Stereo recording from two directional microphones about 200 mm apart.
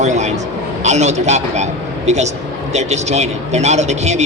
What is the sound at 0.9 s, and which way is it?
Speech, 35° right (ahead or behind).